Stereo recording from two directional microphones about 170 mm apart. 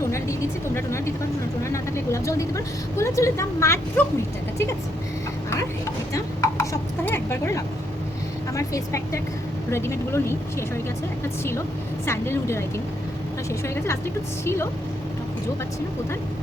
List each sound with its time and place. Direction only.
0.0 s vehicle: 15° left (ahead or behind)
0.8 s speech: 15° left (ahead or behind)
1.7 s vehicle: 15° left (ahead or behind)
2.9 s speech: 15° left (ahead or behind)
6.1 s speech: 15° left (ahead or behind)
12.0 s speech: 15° left (ahead or behind)